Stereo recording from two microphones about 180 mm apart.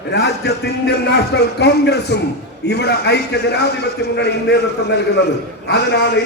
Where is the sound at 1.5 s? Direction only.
70° left (ahead or behind).